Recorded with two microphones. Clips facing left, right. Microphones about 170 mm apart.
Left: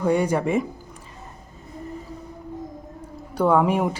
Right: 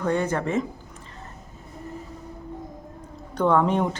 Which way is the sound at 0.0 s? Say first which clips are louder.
Left 3 dB; 10° left (ahead or behind).